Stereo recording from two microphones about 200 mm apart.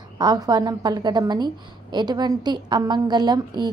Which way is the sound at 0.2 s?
20° right (ahead or behind).